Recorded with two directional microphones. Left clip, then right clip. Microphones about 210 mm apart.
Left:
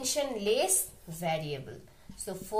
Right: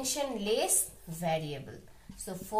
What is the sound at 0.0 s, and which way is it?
Speech, 35° left (ahead or behind).